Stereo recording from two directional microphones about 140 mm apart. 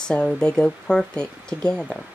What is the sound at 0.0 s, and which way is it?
Speech, 5° left (ahead or behind).